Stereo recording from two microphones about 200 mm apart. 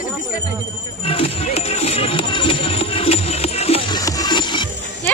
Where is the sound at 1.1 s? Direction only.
30° left (ahead or behind).